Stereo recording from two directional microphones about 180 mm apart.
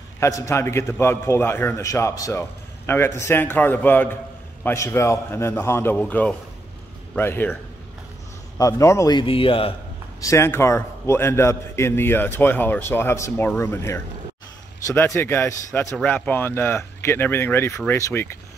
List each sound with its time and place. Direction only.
0.2 s a man's voice: 15° left (ahead or behind)
8.5 s a man's voice: 15° left (ahead or behind)
10.2 s a man's voice: 15° left (ahead or behind)